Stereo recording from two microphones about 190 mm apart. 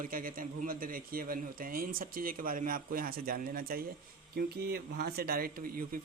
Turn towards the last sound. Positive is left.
turn(degrees=-50)  # may be behind; listen again after turning